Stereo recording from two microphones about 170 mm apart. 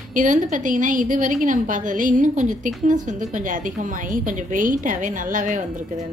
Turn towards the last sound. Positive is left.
turn(degrees=-50)  # may be behind; listen again after turning